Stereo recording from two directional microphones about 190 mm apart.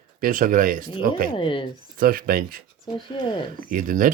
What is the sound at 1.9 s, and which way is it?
Speech, 50° right (ahead or behind).